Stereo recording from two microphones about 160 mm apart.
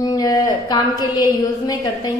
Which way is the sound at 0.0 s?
25° left (ahead or behind).